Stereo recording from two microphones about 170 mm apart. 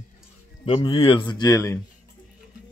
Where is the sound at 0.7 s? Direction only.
30° left (ahead or behind).